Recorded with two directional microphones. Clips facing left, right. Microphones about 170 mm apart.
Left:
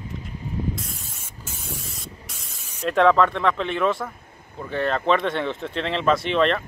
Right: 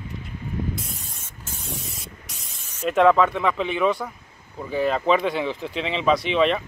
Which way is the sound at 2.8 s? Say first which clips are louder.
Right 1 dB; 5° right (ahead or behind).